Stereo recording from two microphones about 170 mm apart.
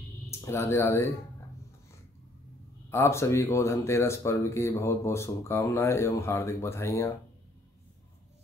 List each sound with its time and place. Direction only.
0.3 s speech: 15° left (ahead or behind)
2.9 s speech: 15° left (ahead or behind)